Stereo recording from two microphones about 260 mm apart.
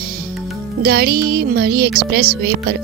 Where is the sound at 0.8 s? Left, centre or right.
Right.